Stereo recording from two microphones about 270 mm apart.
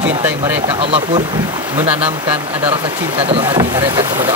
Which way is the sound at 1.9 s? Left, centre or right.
Centre.